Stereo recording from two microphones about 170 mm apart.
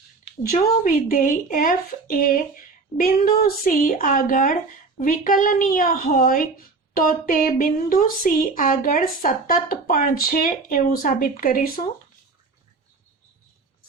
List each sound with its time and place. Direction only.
0.5 s a woman's voice: 55° left (ahead or behind)